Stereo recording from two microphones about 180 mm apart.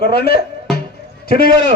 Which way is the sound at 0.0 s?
60° left (ahead or behind).